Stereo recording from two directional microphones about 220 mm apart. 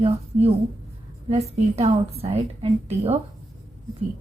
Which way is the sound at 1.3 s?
30° right (ahead or behind).